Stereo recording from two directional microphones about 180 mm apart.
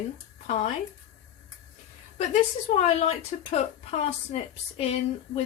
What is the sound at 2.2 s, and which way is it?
A woman's voice, 40° left (ahead or behind).